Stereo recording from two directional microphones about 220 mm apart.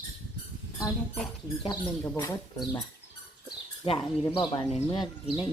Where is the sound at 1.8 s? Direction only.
10° left (ahead or behind).